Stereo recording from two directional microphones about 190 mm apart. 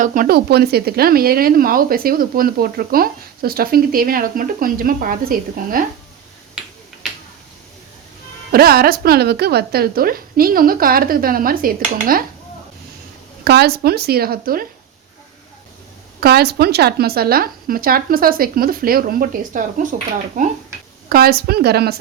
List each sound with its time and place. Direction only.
0.0 s speech: 45° right (ahead or behind)
6.6 s finger snapping: centre (ahead or behind)
8.5 s speech: 55° right (ahead or behind)
13.4 s a woman's voice: 55° right (ahead or behind)
16.2 s speech: 55° right (ahead or behind)
21.1 s a woman's voice: 55° right (ahead or behind)